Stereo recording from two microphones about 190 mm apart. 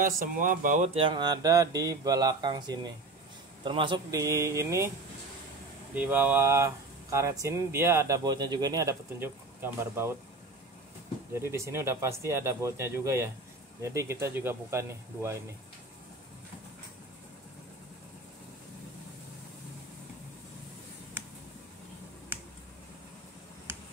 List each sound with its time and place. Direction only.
0.0 s speech: 45° right (ahead or behind); by 4.9 s 15° right (ahead or behind)
5.9 s speech: 10° right (ahead or behind)
11.3 s speech: 15° right (ahead or behind)